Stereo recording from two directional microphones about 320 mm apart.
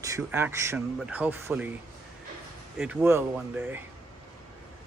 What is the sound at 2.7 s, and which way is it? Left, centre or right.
Speech, centre.